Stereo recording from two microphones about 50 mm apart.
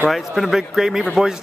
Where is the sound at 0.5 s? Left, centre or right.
Centre.